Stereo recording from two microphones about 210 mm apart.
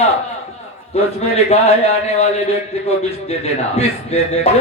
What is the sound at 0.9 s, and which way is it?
A man's voice, 30° left (ahead or behind).